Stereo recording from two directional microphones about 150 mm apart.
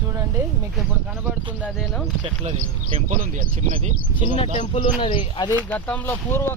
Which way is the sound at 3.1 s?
60° right (ahead or behind).